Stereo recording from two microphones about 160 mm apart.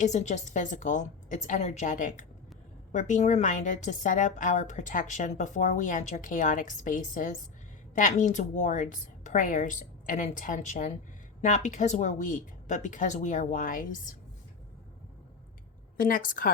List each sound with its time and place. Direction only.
0.0 s a woman's voice: 45° left (ahead or behind)
16.0 s a woman's voice: 60° left (ahead or behind)